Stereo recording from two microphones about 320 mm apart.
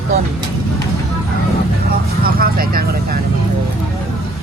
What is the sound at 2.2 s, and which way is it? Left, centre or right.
Speech, right.